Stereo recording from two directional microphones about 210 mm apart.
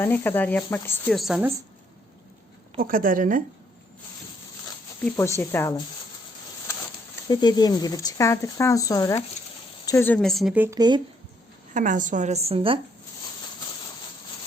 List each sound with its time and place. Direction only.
0.0 s speech: 10° left (ahead or behind)
2.8 s a woman's voice: 40° right (ahead or behind)
5.0 s speech: 10° left (ahead or behind)
7.3 s speech: 20° left (ahead or behind); by 11.0 s 20° right (ahead or behind)
11.7 s a woman's voice: 35° right (ahead or behind)